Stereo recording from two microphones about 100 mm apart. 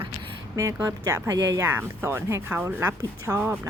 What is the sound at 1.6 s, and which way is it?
Speech, 25° right (ahead or behind).